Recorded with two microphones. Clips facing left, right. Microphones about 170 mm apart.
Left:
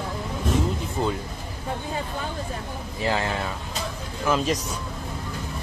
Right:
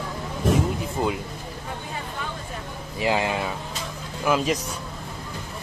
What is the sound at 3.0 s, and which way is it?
Speech, 15° right (ahead or behind).